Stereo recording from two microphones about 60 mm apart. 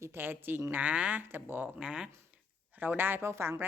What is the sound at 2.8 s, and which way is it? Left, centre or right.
Speech, right.